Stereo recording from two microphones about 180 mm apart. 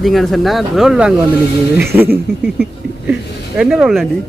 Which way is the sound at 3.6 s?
5° right (ahead or behind).